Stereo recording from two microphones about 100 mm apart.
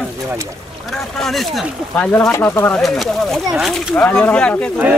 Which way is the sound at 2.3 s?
25° left (ahead or behind).